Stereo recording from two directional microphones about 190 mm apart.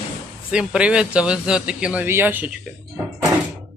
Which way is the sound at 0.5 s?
5° right (ahead or behind).